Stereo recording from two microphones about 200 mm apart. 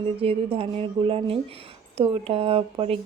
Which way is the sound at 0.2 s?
30° right (ahead or behind).